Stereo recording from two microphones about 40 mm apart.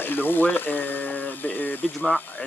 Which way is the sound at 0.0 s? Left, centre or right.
Left.